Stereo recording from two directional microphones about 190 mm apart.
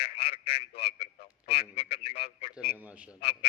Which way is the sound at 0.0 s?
30° left (ahead or behind).